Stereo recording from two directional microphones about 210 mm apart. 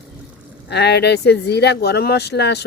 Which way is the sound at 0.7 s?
55° left (ahead or behind).